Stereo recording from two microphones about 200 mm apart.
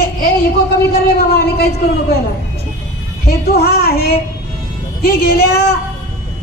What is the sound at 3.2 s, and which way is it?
Speech, 50° left (ahead or behind).